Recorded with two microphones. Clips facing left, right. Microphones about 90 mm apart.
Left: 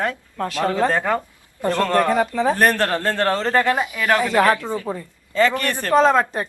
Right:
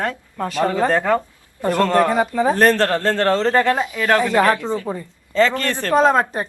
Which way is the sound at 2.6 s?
15° left (ahead or behind).